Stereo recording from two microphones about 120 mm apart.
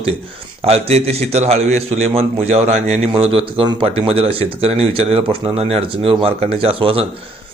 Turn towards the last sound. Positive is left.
turn(degrees=-50)  # may be behind; listen again after turning